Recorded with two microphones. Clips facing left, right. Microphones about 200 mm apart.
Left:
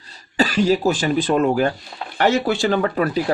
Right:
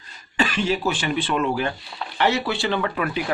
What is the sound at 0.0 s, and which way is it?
Speech, 35° left (ahead or behind).